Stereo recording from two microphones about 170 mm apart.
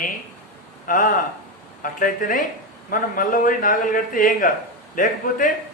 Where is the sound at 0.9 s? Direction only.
50° left (ahead or behind).